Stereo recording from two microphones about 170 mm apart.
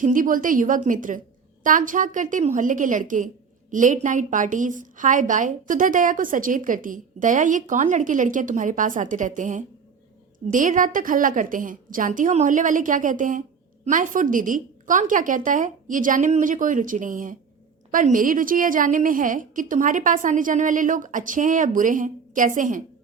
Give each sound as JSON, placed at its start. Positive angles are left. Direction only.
{"t": 0.0, "sound": "a woman's voice", "side_deg": -50}